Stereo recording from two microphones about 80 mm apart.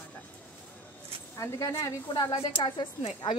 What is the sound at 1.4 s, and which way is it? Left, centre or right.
A woman's voice, left.